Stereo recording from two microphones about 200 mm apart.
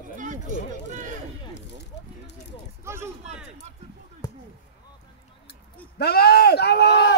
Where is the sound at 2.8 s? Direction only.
15° right (ahead or behind).